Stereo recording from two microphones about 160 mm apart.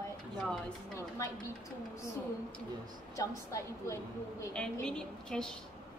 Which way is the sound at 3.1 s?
20° left (ahead or behind).